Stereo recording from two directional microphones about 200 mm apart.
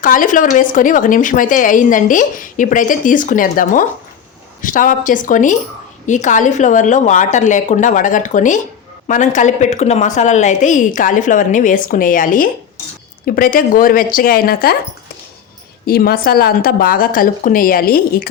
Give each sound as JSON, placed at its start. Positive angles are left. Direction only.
{"t": 0.0, "sound": "a woman's voice", "side_deg": 40}
{"t": 15.9, "sound": "a woman's voice", "side_deg": 50}